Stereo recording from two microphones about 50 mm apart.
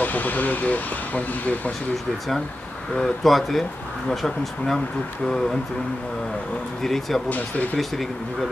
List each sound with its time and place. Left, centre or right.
0.0 s speech: left
3.0 s speech: centre
6.8 s speech: centre
7.2 s speech: left
7.7 s speech: centre